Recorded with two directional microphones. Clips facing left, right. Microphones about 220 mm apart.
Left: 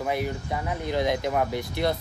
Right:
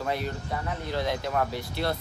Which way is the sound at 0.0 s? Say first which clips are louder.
Left 3 dB; 15° left (ahead or behind).